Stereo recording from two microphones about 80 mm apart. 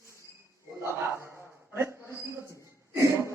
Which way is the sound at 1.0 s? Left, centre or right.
Right.